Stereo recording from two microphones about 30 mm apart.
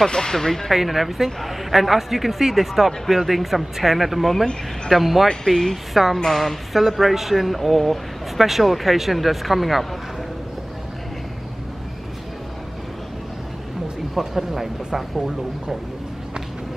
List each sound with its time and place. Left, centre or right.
0.0 s speech: left
0.7 s speech: centre
5.5 s speech: centre
14.1 s speech: centre